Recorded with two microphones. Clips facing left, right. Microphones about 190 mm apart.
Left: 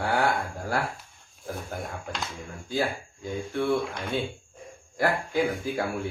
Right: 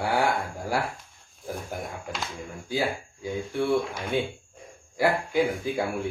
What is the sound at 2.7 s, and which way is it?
Speech, 10° right (ahead or behind).